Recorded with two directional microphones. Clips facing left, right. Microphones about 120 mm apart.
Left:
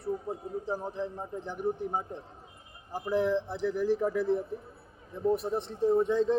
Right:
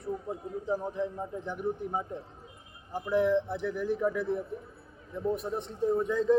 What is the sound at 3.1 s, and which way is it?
Speech, 35° left (ahead or behind).